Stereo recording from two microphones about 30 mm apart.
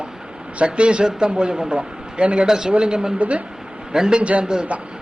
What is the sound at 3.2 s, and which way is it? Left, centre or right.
Speech, right.